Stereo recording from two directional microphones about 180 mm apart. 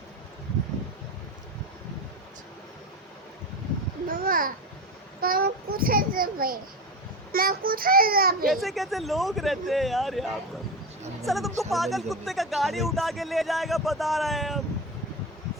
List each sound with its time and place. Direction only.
4.1 s babbling: 50° right (ahead or behind)
5.2 s a child's voice: 55° right (ahead or behind)
8.4 s speech: centre (ahead or behind)